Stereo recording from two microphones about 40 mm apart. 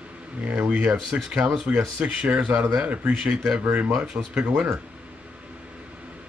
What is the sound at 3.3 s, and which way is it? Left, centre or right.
Speech, centre.